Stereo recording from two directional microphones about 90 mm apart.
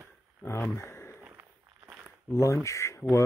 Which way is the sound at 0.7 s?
30° left (ahead or behind).